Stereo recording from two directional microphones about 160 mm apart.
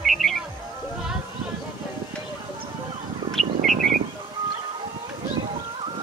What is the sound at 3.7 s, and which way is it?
Bird, 50° right (ahead or behind).